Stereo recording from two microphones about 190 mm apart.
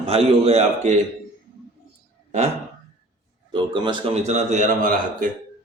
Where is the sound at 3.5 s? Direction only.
25° right (ahead or behind).